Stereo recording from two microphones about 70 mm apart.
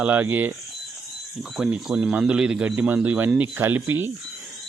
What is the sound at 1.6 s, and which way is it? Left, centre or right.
Speech, centre.